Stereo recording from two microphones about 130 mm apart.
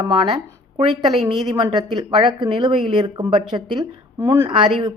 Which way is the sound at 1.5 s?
40° right (ahead or behind).